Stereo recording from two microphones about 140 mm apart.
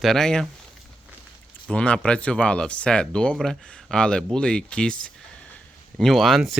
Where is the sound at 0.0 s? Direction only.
5° left (ahead or behind).